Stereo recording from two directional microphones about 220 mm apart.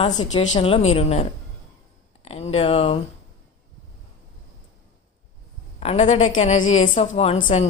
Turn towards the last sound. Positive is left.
turn(degrees=30)  # may be behind; listen again after turning